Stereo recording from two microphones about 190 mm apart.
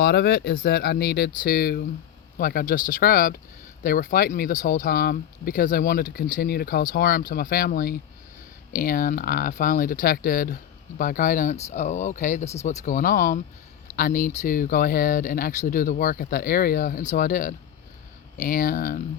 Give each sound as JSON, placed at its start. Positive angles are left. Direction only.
{"t": 0.0, "sound": "speech", "side_deg": 55}